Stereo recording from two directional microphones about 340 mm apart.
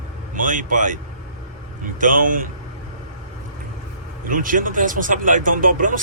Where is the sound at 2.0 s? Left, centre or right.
Right.